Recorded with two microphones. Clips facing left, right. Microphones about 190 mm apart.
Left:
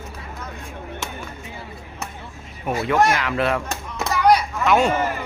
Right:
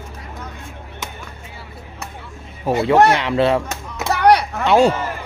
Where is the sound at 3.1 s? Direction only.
30° right (ahead or behind).